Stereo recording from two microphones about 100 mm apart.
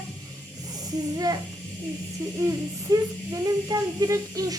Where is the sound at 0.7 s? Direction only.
40° right (ahead or behind).